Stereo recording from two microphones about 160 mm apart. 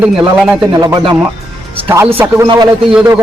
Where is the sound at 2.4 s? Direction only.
30° right (ahead or behind).